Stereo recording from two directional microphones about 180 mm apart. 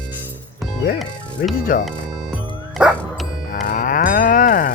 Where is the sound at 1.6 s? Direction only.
50° left (ahead or behind).